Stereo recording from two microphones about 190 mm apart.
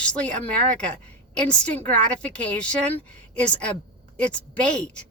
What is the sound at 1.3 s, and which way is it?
A woman's voice, 5° left (ahead or behind).